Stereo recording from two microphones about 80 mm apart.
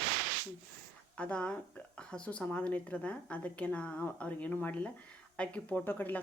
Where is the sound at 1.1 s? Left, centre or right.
Centre.